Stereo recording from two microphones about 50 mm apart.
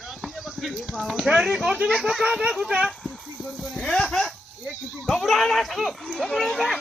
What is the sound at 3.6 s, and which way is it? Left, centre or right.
A child's voice, centre.